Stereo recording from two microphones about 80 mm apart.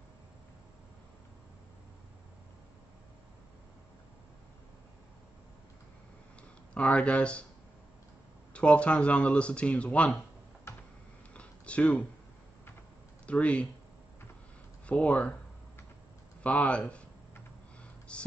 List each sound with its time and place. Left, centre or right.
6.7 s speech: centre
8.5 s speech: centre
10.7 s tick-tock: left
11.3 s a sound: centre
13.3 s speech: centre
14.9 s speech: centre
16.4 s speech: centre
18.1 s a sound: centre